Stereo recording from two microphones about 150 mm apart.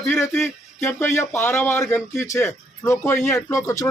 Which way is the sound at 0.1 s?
15° left (ahead or behind).